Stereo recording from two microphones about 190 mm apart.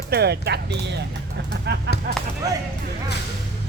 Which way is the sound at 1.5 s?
60° right (ahead or behind).